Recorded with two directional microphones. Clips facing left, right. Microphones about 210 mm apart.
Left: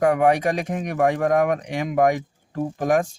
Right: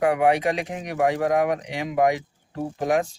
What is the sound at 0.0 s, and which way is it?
Speech, 45° left (ahead or behind).